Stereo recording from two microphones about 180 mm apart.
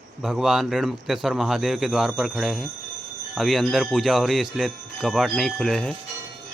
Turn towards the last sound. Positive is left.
turn(degrees=5)  # may be behind; listen again after turning